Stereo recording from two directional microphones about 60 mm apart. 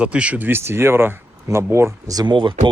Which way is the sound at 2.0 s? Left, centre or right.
Right.